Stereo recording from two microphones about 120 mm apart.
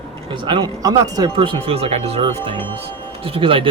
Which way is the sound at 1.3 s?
45° right (ahead or behind).